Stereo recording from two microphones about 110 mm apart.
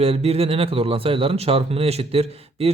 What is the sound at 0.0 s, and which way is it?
Speech, 65° right (ahead or behind).